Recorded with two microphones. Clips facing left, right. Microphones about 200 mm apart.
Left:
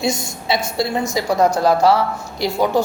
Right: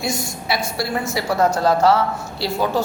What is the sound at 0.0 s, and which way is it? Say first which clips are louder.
A woman's voice: left 3 dB; 20° left (ahead or behind).